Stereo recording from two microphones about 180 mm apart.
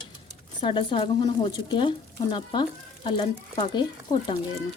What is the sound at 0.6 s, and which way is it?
Speech, 30° left (ahead or behind).